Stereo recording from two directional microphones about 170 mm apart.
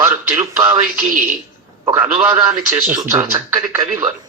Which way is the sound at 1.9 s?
10° right (ahead or behind).